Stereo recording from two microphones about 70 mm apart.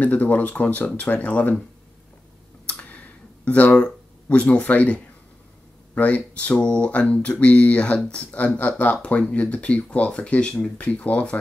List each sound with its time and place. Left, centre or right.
0.0 s speech: left
2.6 s a sound: centre
5.9 s speech: centre